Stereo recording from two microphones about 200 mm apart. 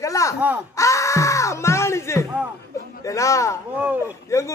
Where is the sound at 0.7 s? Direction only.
15° left (ahead or behind).